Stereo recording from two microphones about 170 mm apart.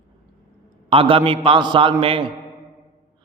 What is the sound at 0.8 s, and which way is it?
A man's voice, 35° right (ahead or behind).